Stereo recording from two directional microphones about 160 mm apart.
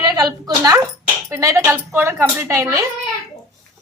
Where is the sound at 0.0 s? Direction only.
25° right (ahead or behind).